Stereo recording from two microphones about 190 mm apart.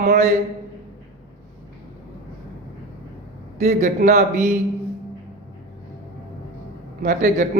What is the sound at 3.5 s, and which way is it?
Speech, 40° right (ahead or behind).